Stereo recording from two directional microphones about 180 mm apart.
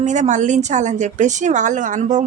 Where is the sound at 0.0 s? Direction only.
40° right (ahead or behind).